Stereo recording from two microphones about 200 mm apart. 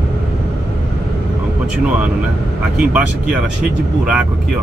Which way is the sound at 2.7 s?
5° right (ahead or behind).